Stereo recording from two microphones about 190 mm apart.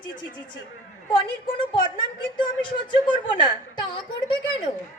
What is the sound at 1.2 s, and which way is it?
Speech, 25° left (ahead or behind).